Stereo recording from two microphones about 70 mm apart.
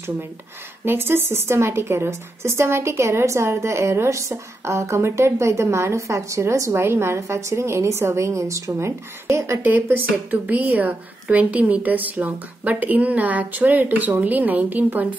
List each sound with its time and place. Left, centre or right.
0.8 s a woman's voice: right
9.7 s a woman's voice: right